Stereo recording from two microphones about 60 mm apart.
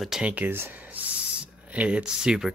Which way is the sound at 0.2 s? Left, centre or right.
Right.